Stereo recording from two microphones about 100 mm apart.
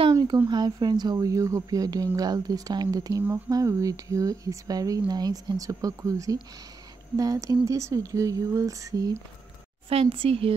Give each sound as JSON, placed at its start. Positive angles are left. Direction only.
{"t": 0.1, "sound": "a sound", "side_deg": -45}
{"t": 0.5, "sound": "speech", "side_deg": -45}
{"t": 9.8, "sound": "a woman's voice", "side_deg": -70}